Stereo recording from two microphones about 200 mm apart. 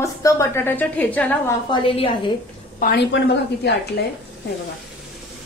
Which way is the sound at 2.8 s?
50° left (ahead or behind).